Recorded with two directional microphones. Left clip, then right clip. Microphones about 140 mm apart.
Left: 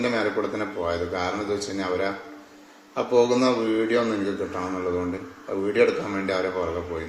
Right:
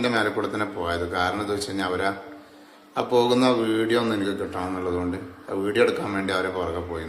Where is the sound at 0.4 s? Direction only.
10° right (ahead or behind).